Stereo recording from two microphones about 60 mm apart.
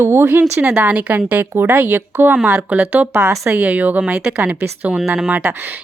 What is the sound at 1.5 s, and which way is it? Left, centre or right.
Speech, right.